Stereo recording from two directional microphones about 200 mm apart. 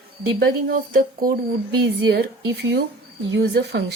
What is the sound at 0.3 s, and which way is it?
Speech, 45° right (ahead or behind).